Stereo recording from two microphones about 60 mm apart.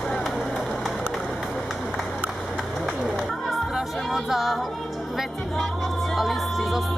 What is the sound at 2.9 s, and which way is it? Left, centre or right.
Speech, centre.